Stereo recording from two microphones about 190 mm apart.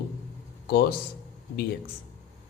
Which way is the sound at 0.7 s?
55° left (ahead or behind).